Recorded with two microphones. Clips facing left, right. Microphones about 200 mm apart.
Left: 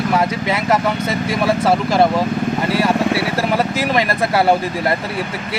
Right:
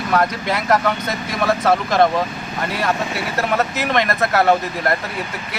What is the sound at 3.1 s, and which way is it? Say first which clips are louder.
Speech: left 7 dB; 65° left (ahead or behind).